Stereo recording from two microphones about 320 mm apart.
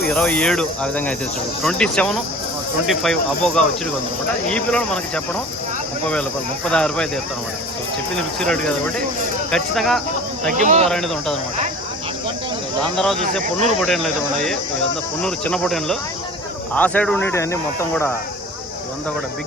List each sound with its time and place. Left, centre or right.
0.1 s speech: centre
6.7 s speech: centre
8.1 s speech: centre
10.5 s speech: right
10.8 s speech: centre
12.8 s speech: centre
13.4 s speech: right
13.7 s speech: centre